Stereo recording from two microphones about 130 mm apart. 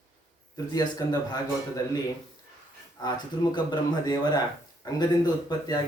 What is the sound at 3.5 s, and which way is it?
Speech, 35° left (ahead or behind).